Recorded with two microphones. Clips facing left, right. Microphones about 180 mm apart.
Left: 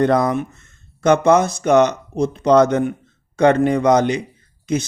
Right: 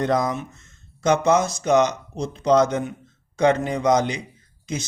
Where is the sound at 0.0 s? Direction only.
60° left (ahead or behind).